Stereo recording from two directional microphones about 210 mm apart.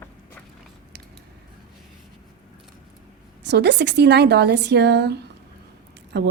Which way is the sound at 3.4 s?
55° right (ahead or behind).